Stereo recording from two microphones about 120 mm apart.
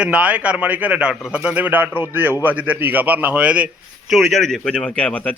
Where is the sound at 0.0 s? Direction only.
10° right (ahead or behind).